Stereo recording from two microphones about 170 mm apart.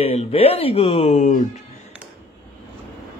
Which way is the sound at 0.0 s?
35° left (ahead or behind).